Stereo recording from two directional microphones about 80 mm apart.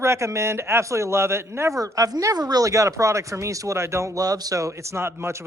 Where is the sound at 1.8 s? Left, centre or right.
Right.